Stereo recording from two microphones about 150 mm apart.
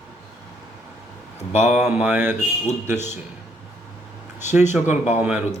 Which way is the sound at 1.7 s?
10° right (ahead or behind).